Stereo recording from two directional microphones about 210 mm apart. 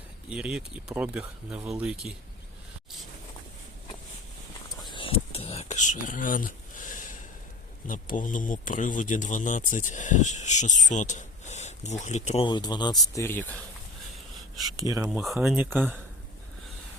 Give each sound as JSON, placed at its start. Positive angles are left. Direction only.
{"t": 0.3, "sound": "speech", "side_deg": -5}
{"t": 4.8, "sound": "a sound", "side_deg": 20}
{"t": 7.9, "sound": "speech", "side_deg": 40}
{"t": 14.3, "sound": "a sound", "side_deg": 0}
{"t": 14.8, "sound": "speech", "side_deg": -15}
{"t": 15.0, "sound": "speech", "side_deg": 0}